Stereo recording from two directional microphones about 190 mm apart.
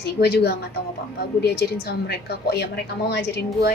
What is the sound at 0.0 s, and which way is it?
Speech, 60° left (ahead or behind).